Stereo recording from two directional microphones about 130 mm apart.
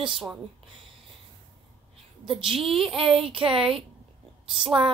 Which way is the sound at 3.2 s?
45° right (ahead or behind).